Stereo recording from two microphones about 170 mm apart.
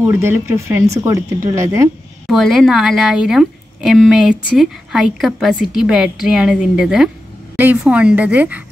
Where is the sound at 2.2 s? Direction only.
Centre (ahead or behind).